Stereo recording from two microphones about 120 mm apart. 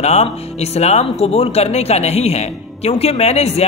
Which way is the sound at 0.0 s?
65° left (ahead or behind).